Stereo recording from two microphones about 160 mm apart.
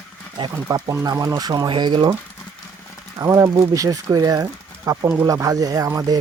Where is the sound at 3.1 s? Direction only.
20° right (ahead or behind).